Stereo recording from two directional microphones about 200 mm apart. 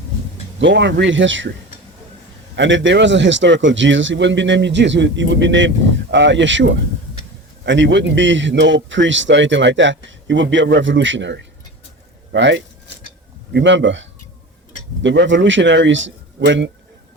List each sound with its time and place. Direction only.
0.6 s speech: 60° right (ahead or behind)
2.6 s speech: 65° right (ahead or behind)